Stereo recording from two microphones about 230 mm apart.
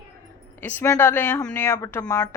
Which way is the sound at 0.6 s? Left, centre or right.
Centre.